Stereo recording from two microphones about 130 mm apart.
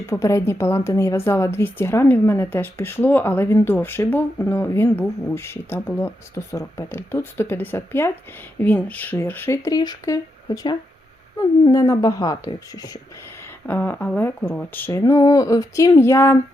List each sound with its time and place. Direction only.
0.0 s speech: 20° left (ahead or behind)
13.7 s speech: 15° left (ahead or behind)